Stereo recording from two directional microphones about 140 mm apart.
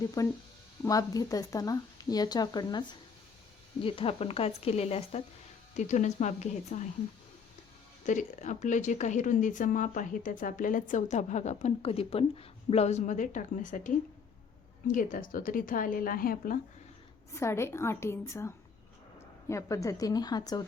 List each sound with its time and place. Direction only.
0.2 s speech: 25° left (ahead or behind)
3.8 s speech: 40° left (ahead or behind)
8.0 s speech: 60° left (ahead or behind)
14.9 s speech: 75° left (ahead or behind); by 16.6 s 90° left
17.3 s speech: 20° left (ahead or behind)